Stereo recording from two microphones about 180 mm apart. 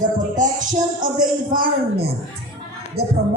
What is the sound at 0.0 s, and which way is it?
Speech, 45° right (ahead or behind).